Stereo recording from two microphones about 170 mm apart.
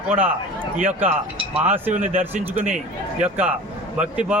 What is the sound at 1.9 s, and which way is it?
Speech, 50° right (ahead or behind).